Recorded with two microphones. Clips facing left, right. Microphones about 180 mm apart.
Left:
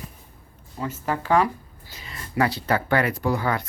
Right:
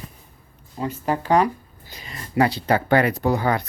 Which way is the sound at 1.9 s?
15° right (ahead or behind).